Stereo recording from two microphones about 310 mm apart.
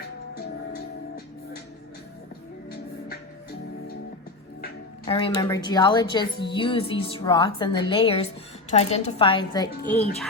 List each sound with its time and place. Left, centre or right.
5.0 s a woman's voice: centre